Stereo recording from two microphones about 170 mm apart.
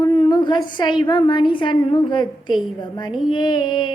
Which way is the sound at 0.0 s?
30° left (ahead or behind).